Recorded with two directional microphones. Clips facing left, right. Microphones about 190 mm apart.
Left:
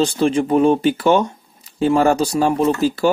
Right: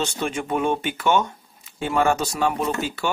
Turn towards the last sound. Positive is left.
turn(degrees=35)  # may be behind; listen again after turning